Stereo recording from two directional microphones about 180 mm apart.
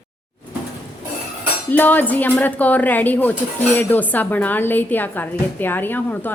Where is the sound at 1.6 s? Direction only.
10° left (ahead or behind).